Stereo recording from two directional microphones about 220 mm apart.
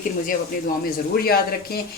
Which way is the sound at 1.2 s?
45° left (ahead or behind).